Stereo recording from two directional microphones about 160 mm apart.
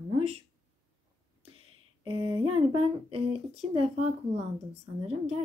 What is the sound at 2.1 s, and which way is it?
Speech, 35° right (ahead or behind).